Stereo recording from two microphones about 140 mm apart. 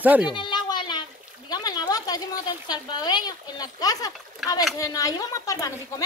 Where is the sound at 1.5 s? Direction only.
30° left (ahead or behind).